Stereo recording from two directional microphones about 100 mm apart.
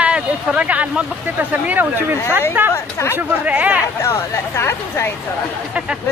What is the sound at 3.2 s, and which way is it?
Speech, 15° right (ahead or behind).